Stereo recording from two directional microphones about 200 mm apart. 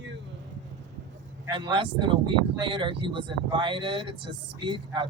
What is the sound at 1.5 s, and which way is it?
Speech, 25° right (ahead or behind).